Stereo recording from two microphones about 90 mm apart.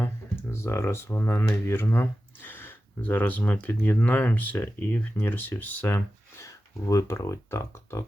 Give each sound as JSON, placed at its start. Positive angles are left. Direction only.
{"t": 0.0, "sound": "speech", "side_deg": 30}
{"t": 6.4, "sound": "speech", "side_deg": 35}